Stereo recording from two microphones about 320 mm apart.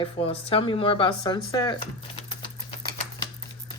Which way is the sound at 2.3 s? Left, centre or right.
Centre.